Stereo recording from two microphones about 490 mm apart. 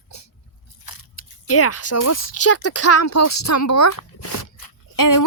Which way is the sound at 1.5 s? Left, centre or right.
Left.